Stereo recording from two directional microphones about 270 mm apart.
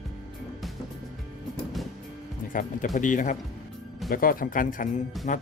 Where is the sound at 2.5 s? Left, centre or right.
Left.